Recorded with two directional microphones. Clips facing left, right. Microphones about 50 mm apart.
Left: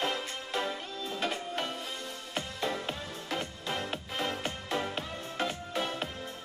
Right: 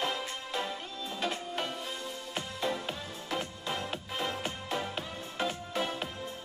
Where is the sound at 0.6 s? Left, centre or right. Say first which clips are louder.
Left 3 dB; centre.